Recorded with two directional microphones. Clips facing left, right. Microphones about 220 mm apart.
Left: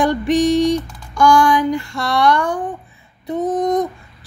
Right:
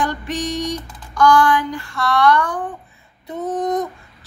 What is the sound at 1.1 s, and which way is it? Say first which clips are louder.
Speech: left 1 dB; 10° left (ahead or behind).